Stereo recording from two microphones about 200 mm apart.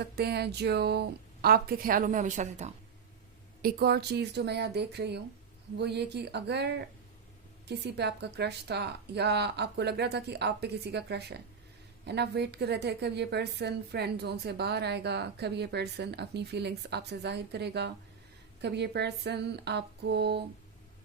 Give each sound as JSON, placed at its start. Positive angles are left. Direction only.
{"t": 0.0, "sound": "speech", "side_deg": -55}
{"t": 3.6, "sound": "a woman's voice", "side_deg": -50}